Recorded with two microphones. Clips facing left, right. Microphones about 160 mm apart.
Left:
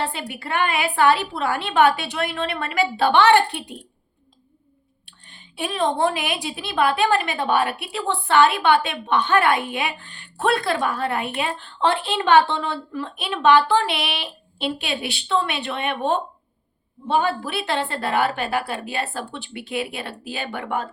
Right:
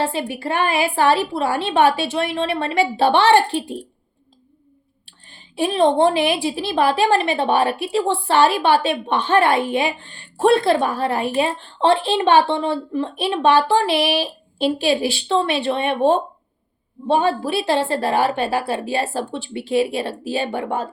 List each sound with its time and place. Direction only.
0.0 s a woman's voice: 25° right (ahead or behind)
5.0 s a woman's voice: 30° right (ahead or behind)